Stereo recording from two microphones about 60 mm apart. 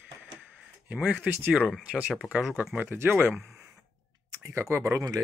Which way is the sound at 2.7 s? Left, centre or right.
Right.